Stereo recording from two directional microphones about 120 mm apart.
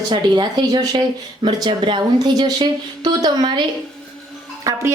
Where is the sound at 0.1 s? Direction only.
35° right (ahead or behind).